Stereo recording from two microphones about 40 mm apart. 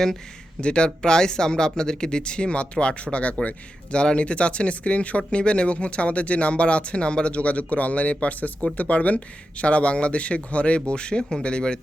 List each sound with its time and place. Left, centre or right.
0.6 s speech: left
11.2 s speech: centre